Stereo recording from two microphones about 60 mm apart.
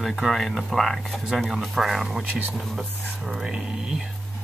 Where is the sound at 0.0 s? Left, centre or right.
Centre.